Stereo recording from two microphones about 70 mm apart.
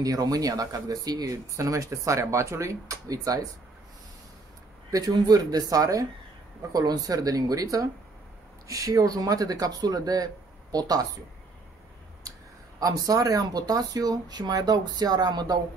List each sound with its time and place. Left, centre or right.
0.0 s speech: right
4.9 s speech: right
12.3 s speech: right